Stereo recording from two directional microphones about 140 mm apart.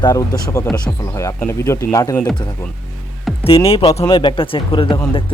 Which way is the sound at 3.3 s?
Centre (ahead or behind).